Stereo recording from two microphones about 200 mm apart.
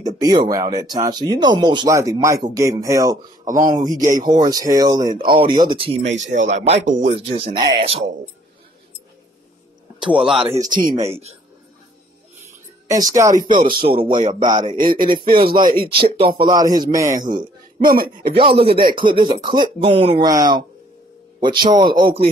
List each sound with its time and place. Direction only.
0.0 s speech: 20° right (ahead or behind)
5.9 s speech: 65° right (ahead or behind)
6.3 s speech: 35° right (ahead or behind)
9.9 s a man's voice: 5° right (ahead or behind)
10.6 s speech: 40° right (ahead or behind)
12.8 s a woman's voice: 15° right (ahead or behind)
13.3 s speech: 40° right (ahead or behind)
13.8 s speech: 25° right (ahead or behind)
14.8 s speech: 45° right (ahead or behind)
16.3 s speech: 20° right (ahead or behind)
17.8 s speech: 45° right (ahead or behind)
18.3 s speech: 25° right (ahead or behind)